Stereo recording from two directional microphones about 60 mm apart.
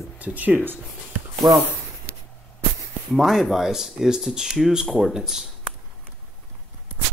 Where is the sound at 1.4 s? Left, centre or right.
Right.